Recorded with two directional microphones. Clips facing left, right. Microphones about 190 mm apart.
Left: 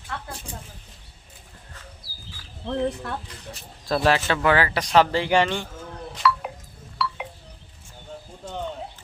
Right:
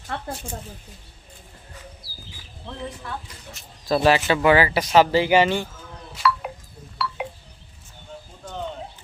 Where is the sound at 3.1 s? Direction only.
60° left (ahead or behind).